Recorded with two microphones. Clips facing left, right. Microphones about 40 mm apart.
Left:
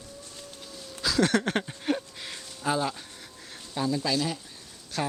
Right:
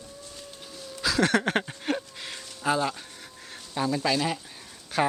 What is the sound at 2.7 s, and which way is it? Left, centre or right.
Speech, centre.